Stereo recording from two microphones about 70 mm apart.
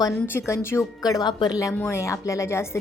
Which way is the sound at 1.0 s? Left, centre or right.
Left.